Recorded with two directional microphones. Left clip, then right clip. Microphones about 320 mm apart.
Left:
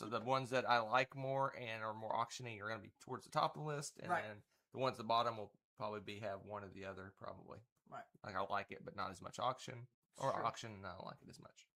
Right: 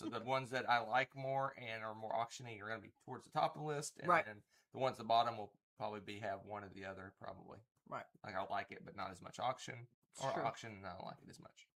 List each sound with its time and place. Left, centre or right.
0.1 s speech: left
8.2 s speech: left